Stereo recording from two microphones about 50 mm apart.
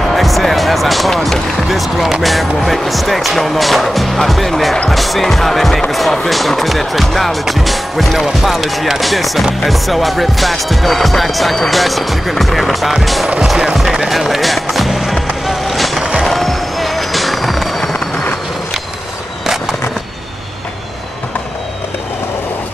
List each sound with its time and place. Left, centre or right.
0.1 s basketball bounce: centre
1.1 s music: centre
4.9 s speech: centre
15.4 s music: centre
16.0 s music: right
16.3 s music: centre